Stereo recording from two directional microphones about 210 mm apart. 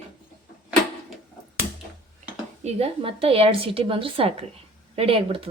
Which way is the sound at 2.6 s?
25° right (ahead or behind).